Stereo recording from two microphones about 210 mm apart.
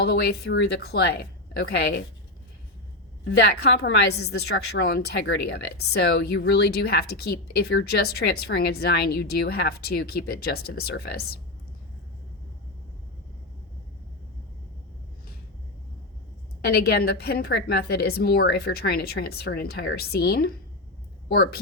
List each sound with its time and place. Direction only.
0.0 s a woman's voice: 50° left (ahead or behind)
3.2 s a woman's voice: 50° left (ahead or behind)
16.6 s a woman's voice: 50° left (ahead or behind)